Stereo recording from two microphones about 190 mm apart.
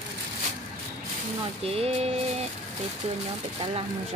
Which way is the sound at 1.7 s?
30° right (ahead or behind).